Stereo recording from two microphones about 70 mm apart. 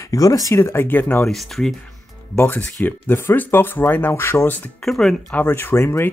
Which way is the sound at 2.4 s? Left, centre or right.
Left.